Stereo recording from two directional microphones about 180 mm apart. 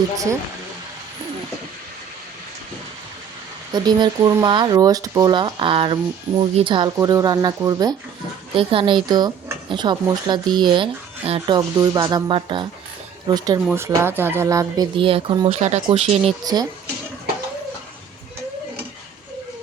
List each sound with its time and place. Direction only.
3.7 s speech: 25° right (ahead or behind)
16.4 s speech: 20° right (ahead or behind)